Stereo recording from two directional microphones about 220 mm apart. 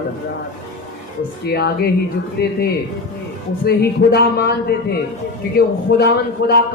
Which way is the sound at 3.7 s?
45° left (ahead or behind).